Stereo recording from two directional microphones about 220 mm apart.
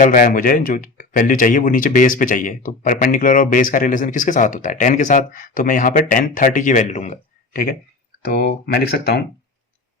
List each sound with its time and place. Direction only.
0.0 s speech: 35° left (ahead or behind)